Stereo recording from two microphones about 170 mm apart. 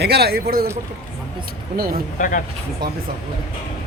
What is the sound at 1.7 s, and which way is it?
Speech, 65° right (ahead or behind).